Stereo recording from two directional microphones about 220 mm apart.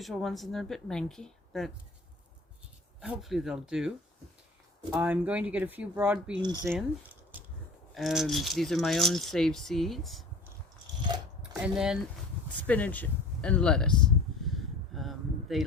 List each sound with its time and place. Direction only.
0.0 s speech: centre (ahead or behind)
3.0 s speech: centre (ahead or behind)
6.4 s speech: 20° right (ahead or behind)
7.9 s speech: centre (ahead or behind)
11.5 s speech: 5° right (ahead or behind)
14.4 s a sound: centre (ahead or behind)